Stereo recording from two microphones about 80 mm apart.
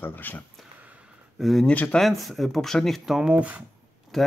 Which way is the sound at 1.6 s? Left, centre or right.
Centre.